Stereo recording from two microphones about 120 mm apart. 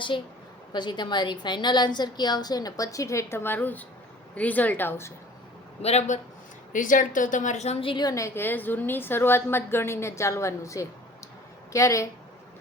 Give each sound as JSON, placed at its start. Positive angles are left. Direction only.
{"t": 0.7, "sound": "a woman's voice", "side_deg": 40}
{"t": 5.8, "sound": "a man's voice", "side_deg": 65}
{"t": 6.7, "sound": "a woman's voice", "side_deg": 90}
{"t": 8.0, "sound": "a woman's voice", "side_deg": 25}